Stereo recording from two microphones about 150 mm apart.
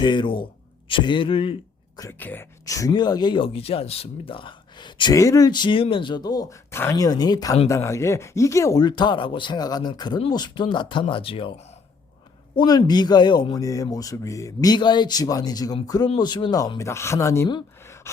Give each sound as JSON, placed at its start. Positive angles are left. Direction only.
{"t": 0.0, "sound": "a man's voice", "side_deg": 30}
{"t": 2.0, "sound": "speech", "side_deg": 15}
{"t": 12.5, "sound": "speech", "side_deg": 25}
{"t": 17.8, "sound": "a sound", "side_deg": 20}